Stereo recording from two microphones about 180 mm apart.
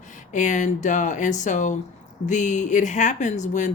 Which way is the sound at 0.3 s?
45° left (ahead or behind).